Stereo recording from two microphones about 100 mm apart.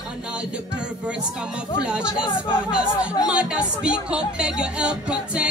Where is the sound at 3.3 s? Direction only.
10° right (ahead or behind).